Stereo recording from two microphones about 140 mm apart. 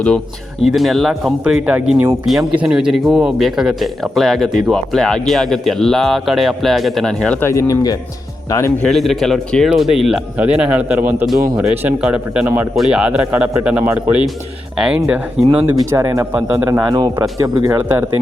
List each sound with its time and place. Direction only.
0.6 s speech: centre (ahead or behind)
7.4 s speech: 20° left (ahead or behind)
8.8 s a man's voice: centre (ahead or behind); by 18.0 s 20° right (ahead or behind)